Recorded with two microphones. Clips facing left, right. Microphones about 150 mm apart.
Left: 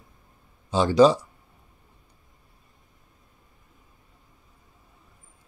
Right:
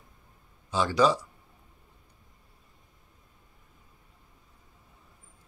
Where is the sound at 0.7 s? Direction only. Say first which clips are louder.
Left 7 dB; 25° left (ahead or behind).